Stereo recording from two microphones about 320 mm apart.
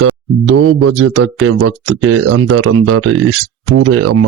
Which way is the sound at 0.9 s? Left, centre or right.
Right.